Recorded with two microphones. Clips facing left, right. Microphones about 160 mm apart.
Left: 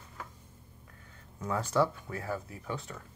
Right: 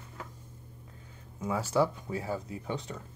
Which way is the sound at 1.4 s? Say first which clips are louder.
Right 1 dB; 5° right (ahead or behind).